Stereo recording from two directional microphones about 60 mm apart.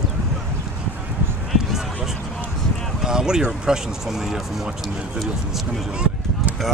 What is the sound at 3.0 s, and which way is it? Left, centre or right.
Speech, centre.